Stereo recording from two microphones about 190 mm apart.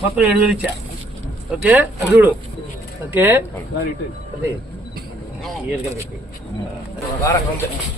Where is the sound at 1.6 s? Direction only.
10° right (ahead or behind).